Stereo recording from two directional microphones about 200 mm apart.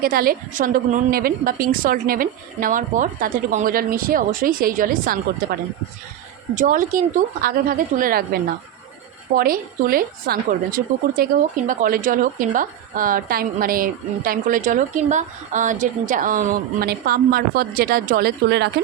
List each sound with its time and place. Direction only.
0.0 s a woman's voice: 45° right (ahead or behind)